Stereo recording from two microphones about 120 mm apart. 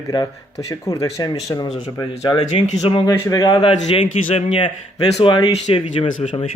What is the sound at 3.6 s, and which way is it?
A man's voice, 50° left (ahead or behind).